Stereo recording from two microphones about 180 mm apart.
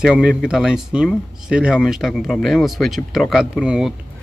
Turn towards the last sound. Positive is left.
turn(degrees=0)  # may be behind; listen again after turning